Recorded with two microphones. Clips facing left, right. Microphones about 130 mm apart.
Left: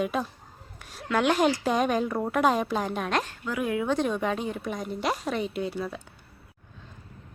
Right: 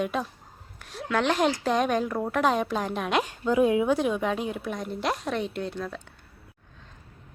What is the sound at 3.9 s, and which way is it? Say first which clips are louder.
A woman's voice: right 1 dB; 5° right (ahead or behind).